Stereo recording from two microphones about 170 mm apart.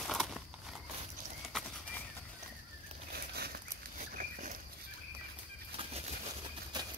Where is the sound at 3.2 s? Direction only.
70° right (ahead or behind).